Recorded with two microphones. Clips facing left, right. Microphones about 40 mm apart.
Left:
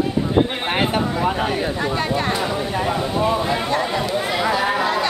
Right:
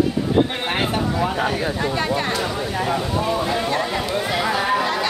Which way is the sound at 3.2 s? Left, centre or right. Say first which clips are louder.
Left 2 dB; centre.